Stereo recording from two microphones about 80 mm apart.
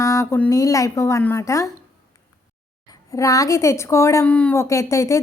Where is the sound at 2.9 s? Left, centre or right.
Left.